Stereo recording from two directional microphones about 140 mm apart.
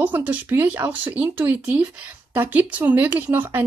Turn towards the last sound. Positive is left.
turn(degrees=-15)  # may be behind; listen again after turning